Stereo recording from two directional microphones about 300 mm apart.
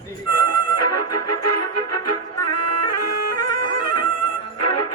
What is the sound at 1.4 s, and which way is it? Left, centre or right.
Music, left.